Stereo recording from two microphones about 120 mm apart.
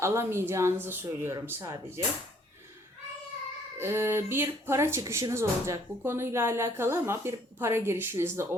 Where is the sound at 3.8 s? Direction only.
20° right (ahead or behind).